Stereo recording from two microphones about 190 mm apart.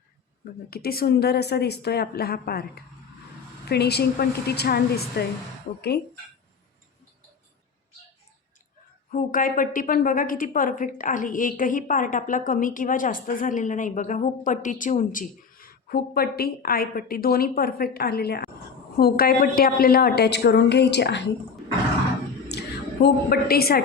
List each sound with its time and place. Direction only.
0.7 s a woman's voice: 55° left (ahead or behind)
9.1 s a woman's voice: 45° left (ahead or behind); by 21.2 s 60° left (ahead or behind)
22.5 s a sound: 60° left (ahead or behind)
23.0 s a woman's voice: 55° left (ahead or behind)